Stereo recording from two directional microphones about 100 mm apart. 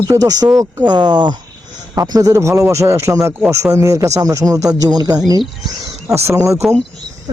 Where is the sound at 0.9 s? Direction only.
45° right (ahead or behind).